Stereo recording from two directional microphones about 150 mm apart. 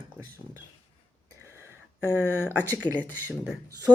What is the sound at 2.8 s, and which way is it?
Speech, 20° left (ahead or behind).